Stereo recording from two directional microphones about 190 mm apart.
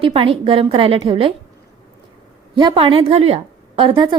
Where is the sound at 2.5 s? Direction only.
25° right (ahead or behind).